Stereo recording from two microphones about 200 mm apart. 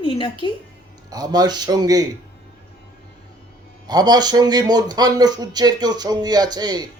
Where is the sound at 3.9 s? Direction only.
20° right (ahead or behind).